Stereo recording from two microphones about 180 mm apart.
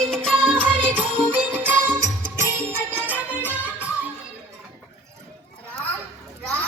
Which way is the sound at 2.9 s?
10° right (ahead or behind).